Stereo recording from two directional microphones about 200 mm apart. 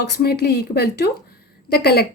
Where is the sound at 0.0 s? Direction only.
50° left (ahead or behind).